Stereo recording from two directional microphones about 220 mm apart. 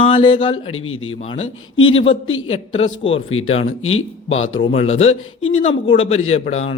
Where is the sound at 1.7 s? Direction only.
65° left (ahead or behind).